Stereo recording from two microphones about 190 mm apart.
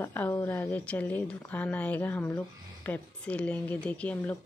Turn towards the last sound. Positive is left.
turn(degrees=5)  # may be behind; listen again after turning